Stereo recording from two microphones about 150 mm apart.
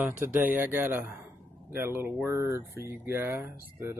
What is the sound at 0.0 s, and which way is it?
Speech, 10° right (ahead or behind).